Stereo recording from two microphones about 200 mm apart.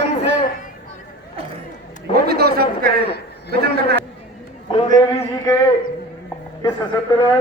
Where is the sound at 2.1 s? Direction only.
50° right (ahead or behind).